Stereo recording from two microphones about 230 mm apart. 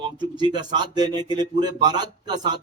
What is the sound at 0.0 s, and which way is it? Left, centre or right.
Speech, centre.